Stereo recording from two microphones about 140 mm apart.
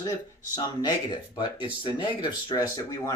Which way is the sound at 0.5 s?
30° left (ahead or behind).